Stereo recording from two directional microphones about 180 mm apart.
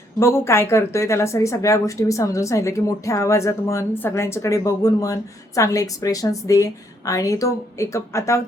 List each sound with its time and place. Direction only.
0.2 s speech: 15° left (ahead or behind)